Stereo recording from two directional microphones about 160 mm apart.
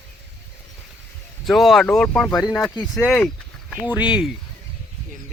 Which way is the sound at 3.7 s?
10° right (ahead or behind).